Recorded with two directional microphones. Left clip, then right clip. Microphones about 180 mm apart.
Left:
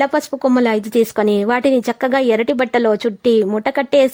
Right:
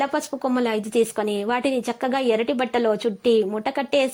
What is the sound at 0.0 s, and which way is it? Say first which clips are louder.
A woman's voice: left 8 dB; 35° left (ahead or behind).